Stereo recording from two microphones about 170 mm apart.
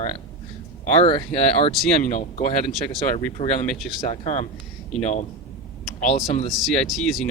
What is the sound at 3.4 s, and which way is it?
Speech, 35° left (ahead or behind).